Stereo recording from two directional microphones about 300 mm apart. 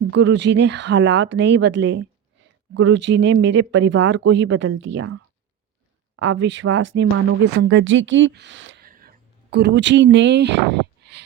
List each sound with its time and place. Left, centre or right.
0.1 s speech: right